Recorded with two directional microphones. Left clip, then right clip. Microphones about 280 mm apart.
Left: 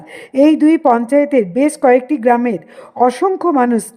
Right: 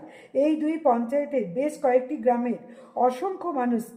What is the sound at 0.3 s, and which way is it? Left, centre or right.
A woman's voice, left.